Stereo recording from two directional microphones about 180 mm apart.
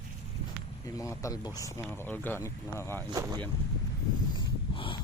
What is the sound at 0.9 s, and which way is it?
Speech, 15° left (ahead or behind).